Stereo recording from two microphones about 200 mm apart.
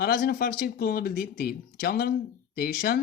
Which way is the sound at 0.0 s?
50° left (ahead or behind).